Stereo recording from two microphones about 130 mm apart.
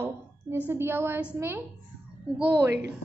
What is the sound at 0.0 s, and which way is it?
A woman's voice, 15° right (ahead or behind).